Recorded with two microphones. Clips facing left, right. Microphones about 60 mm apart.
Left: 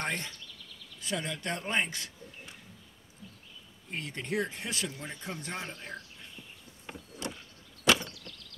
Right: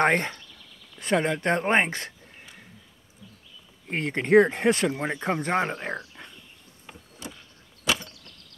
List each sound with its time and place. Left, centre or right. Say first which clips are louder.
0.0 s speech: right 13 dB; right
3.8 s speech: right 10 dB; right